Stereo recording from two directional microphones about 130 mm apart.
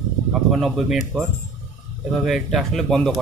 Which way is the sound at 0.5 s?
Centre (ahead or behind).